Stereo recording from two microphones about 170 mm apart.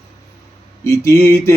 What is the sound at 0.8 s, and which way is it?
Speech, 15° left (ahead or behind).